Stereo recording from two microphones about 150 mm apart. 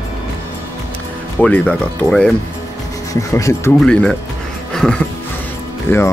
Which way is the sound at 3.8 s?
5° left (ahead or behind).